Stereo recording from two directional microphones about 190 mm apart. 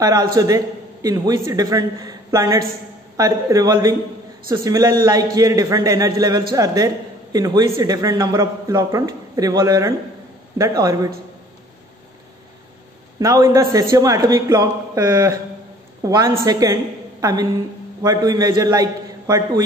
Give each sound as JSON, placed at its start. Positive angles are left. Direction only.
{"t": 0.0, "sound": "a man's voice", "side_deg": -20}
{"t": 13.2, "sound": "a man's voice", "side_deg": -20}